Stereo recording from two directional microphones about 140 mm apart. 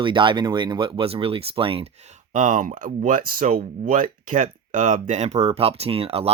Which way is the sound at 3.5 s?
65° right (ahead or behind).